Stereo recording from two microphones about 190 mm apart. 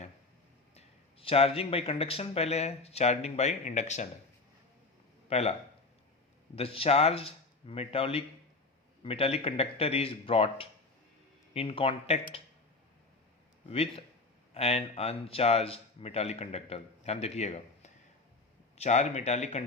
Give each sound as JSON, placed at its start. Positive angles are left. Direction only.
{"t": 0.8, "sound": "a man's voice", "side_deg": 30}
{"t": 5.3, "sound": "a man's voice", "side_deg": 35}
{"t": 6.6, "sound": "a man's voice", "side_deg": 30}
{"t": 13.7, "sound": "a man's voice", "side_deg": 30}